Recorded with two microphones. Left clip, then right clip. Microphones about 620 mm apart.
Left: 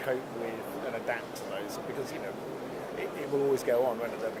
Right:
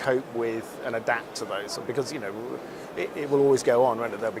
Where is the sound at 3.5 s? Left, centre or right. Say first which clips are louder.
Right 6 dB; right.